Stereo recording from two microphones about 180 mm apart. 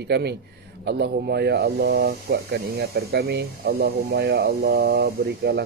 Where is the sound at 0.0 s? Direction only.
70° right (ahead or behind).